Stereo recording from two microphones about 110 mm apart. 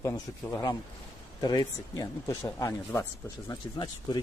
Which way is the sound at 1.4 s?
40° left (ahead or behind).